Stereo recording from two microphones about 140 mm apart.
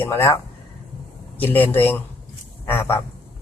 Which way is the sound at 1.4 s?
15° left (ahead or behind).